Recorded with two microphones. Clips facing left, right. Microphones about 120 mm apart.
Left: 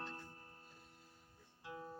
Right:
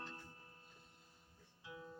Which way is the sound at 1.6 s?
50° left (ahead or behind).